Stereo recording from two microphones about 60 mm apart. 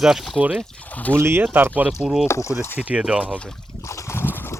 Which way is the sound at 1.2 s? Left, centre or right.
Right.